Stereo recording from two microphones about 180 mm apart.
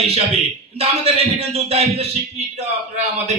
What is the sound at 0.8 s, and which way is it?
A man's voice, 35° right (ahead or behind).